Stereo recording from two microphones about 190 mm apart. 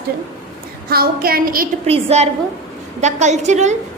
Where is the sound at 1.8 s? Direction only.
35° right (ahead or behind).